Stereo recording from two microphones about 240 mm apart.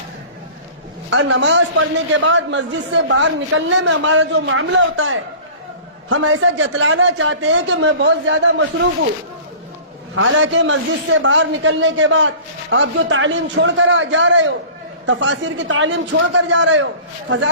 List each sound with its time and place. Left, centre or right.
1.1 s a man's voice: right
10.2 s a man's voice: right